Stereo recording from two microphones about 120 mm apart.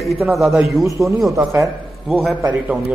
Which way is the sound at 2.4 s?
10° right (ahead or behind).